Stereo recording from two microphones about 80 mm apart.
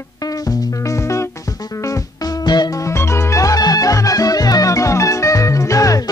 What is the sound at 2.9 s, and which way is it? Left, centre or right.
Music, left.